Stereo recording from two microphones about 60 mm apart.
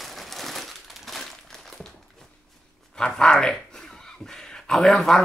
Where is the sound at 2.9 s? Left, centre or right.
Centre.